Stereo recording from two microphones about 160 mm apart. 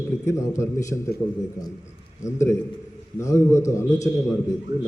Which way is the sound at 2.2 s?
20° left (ahead or behind).